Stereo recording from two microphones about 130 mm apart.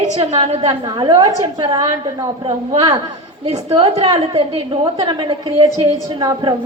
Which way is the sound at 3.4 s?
45° right (ahead or behind).